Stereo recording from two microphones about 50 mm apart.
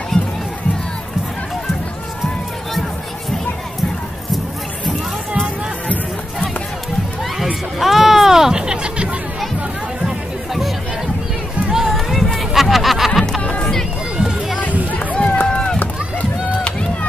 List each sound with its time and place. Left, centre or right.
0.1 s music: centre
7.8 s music: centre; by 9.1 s right
10.0 s chatter: centre
11.7 s run: centre
12.1 s run: centre
12.5 s music: centre
13.4 s crowd: left
14.9 s run: left
15.4 s run: centre